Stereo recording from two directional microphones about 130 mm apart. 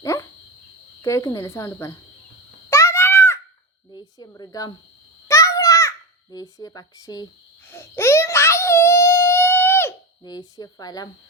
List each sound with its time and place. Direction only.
0.0 s dog: 20° left (ahead or behind)
1.0 s speech: 25° left (ahead or behind)
2.6 s a sound: 20° left (ahead or behind)
4.4 s speech: 30° left (ahead or behind)
5.3 s a sound: 25° left (ahead or behind)
6.3 s speech: 25° left (ahead or behind)
7.7 s babbling: 20° left (ahead or behind)
10.2 s speech: 30° left (ahead or behind)